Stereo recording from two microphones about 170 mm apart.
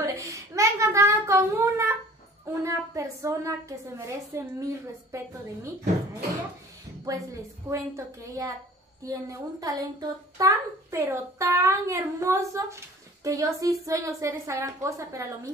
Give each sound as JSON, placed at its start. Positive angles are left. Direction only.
{"t": 0.0, "sound": "a sound", "side_deg": -20}
{"t": 2.4, "sound": "a child's voice", "side_deg": -15}
{"t": 7.1, "sound": "a woman's voice", "side_deg": -20}